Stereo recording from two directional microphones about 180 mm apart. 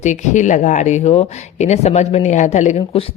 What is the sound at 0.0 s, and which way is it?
Speech, 45° left (ahead or behind).